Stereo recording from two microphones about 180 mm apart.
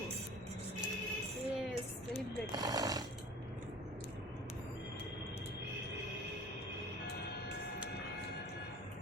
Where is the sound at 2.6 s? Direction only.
20° right (ahead or behind).